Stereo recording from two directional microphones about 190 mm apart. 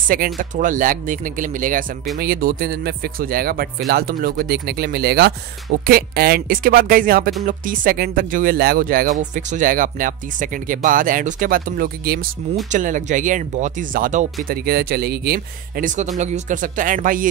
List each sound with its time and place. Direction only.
0.1 s speech: 45° right (ahead or behind)